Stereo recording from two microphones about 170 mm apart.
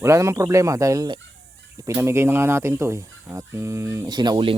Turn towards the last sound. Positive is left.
turn(degrees=-30)  # may be behind; listen again after turning